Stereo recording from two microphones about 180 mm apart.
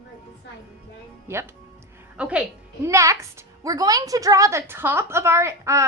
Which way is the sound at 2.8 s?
15° right (ahead or behind).